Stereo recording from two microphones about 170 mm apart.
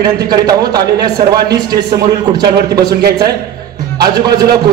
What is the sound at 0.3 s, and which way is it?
Speech, 25° right (ahead or behind).